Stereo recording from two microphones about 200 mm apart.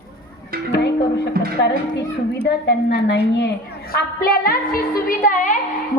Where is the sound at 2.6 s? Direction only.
55° left (ahead or behind).